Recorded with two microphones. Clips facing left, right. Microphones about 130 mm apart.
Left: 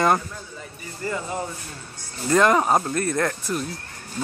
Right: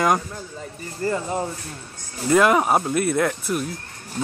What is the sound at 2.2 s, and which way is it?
Speech, 5° right (ahead or behind).